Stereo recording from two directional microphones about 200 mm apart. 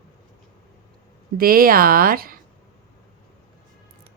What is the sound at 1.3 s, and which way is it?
Speech, 45° right (ahead or behind).